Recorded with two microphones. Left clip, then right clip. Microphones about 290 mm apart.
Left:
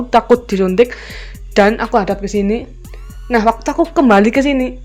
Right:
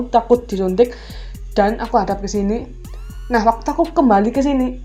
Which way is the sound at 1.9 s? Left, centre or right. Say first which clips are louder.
Left 2 dB; left.